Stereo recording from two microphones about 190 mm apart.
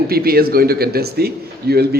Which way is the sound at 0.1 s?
50° right (ahead or behind).